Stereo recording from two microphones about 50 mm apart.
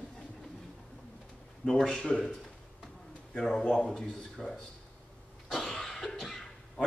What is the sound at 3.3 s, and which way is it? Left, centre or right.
Speech, centre.